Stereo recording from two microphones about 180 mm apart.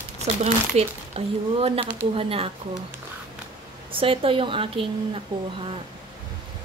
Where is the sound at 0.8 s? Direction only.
35° right (ahead or behind).